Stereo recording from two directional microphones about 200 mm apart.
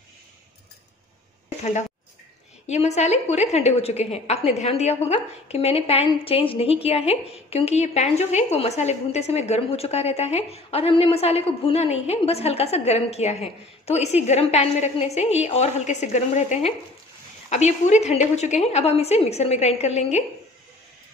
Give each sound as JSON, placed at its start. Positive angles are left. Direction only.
{"t": 1.6, "sound": "a woman's voice", "side_deg": 35}